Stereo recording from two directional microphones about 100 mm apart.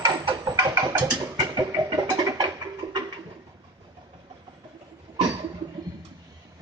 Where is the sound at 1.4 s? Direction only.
45° right (ahead or behind).